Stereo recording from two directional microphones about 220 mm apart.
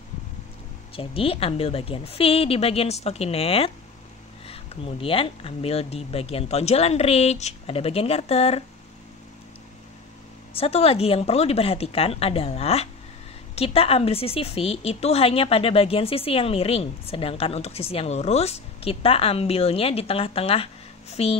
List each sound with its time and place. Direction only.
0.9 s a woman's voice: 25° left (ahead or behind)
10.5 s a woman's voice: 25° left (ahead or behind)